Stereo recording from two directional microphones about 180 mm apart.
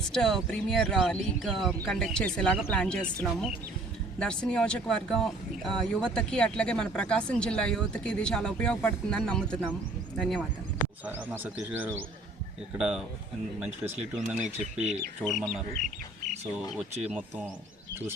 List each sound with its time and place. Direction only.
0.1 s speech: centre (ahead or behind)
11.0 s speech: 10° right (ahead or behind)
14.3 s speech: 40° right (ahead or behind)
15.3 s speech: centre (ahead or behind)